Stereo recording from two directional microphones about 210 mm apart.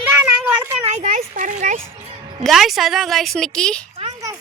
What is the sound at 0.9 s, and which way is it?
Speech, 35° right (ahead or behind).